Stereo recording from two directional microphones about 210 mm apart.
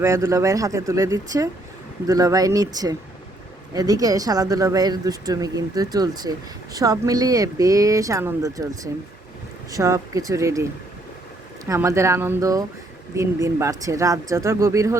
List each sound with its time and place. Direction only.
0.0 s speech: 10° right (ahead or behind)